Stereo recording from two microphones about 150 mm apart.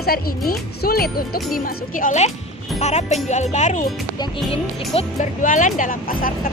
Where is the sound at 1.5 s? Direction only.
65° left (ahead or behind).